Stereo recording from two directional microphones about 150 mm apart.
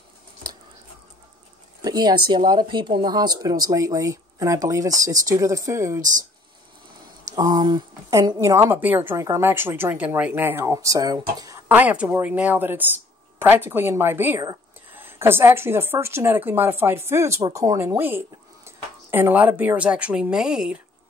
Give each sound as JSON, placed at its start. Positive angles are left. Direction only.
{"t": 1.8, "sound": "speech", "side_deg": -25}
{"t": 7.3, "sound": "speech", "side_deg": -25}
{"t": 11.7, "sound": "speech", "side_deg": -10}